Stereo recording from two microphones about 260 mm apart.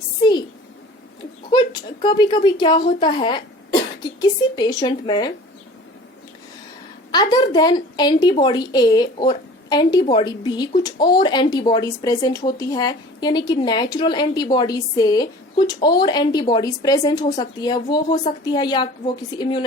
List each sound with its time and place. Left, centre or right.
0.2 s a sound: centre
1.5 s speech: centre
7.1 s a woman's voice: centre